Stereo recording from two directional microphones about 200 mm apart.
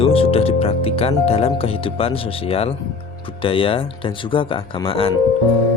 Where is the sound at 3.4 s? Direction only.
25° left (ahead or behind).